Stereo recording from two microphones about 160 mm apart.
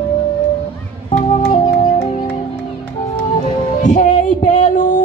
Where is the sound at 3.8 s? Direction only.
50° left (ahead or behind).